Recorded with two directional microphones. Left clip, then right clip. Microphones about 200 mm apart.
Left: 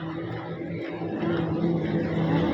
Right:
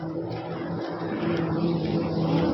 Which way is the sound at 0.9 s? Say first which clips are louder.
Left 1 dB; 10° left (ahead or behind).